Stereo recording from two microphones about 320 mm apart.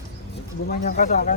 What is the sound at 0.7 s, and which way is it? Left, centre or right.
Speech, left.